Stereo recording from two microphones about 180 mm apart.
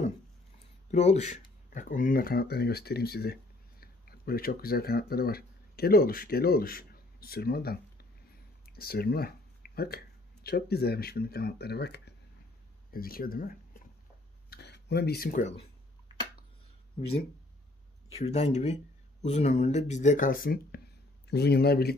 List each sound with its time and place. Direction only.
0.9 s speech: 40° left (ahead or behind); by 12.1 s 65° left (ahead or behind)
12.9 s speech: 55° left (ahead or behind)
14.5 s a sound: 65° left (ahead or behind)
18.2 s speech: 40° left (ahead or behind); by 21.9 s 60° left (ahead or behind)